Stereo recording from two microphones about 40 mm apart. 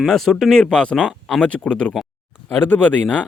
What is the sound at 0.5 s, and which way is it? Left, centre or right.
Speech, left.